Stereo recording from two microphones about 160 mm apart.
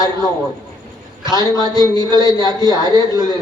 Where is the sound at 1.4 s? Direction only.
25° right (ahead or behind).